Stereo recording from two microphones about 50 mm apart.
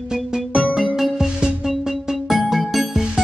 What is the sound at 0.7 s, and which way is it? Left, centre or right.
Music, centre.